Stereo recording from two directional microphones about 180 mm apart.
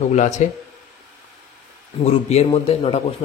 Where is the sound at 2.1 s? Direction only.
35° left (ahead or behind).